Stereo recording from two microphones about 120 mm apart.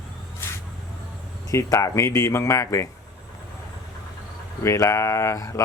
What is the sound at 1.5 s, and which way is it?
Speech, 25° left (ahead or behind).